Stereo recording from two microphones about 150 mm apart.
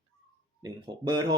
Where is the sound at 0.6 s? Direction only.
30° right (ahead or behind).